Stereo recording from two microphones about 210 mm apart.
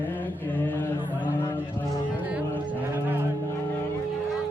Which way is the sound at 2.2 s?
5° right (ahead or behind).